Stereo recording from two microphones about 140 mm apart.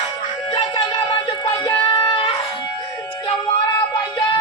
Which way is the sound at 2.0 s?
40° left (ahead or behind).